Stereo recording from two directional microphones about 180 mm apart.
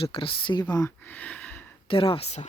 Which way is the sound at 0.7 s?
15° left (ahead or behind).